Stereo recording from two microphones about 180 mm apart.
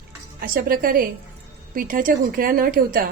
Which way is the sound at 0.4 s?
55° right (ahead or behind).